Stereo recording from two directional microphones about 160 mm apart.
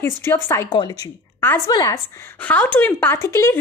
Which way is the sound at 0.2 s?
15° left (ahead or behind).